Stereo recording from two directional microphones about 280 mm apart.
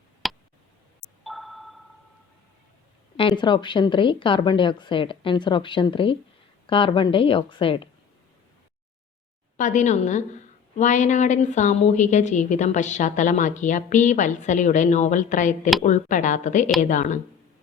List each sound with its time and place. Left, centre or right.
0.2 s tick: centre
1.2 s sonar: centre
3.2 s a woman's voice: centre
9.6 s a woman's voice: left